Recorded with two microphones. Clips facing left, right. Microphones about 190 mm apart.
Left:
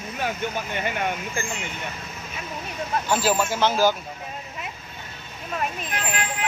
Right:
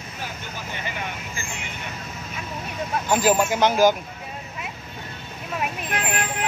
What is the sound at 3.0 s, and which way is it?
Speech, 15° right (ahead or behind).